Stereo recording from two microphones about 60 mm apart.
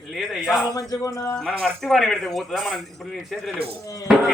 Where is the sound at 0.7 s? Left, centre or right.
Left.